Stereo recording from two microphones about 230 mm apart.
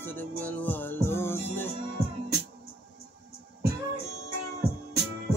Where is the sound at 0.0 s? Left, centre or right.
Centre.